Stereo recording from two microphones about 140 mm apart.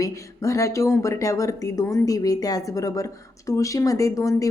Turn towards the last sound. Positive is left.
turn(degrees=25)  # may be behind; listen again after turning